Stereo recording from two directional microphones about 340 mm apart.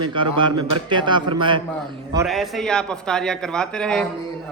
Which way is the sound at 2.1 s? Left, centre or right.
Centre.